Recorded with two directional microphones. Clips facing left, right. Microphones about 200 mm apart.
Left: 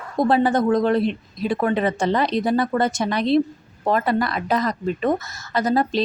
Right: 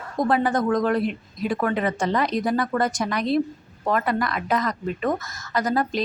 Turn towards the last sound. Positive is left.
turn(degrees=30)  # may be behind; listen again after turning